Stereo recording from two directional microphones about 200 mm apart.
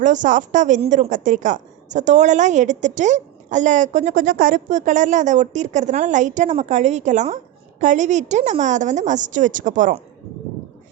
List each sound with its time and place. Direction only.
0.0 s a woman's voice: 40° right (ahead or behind)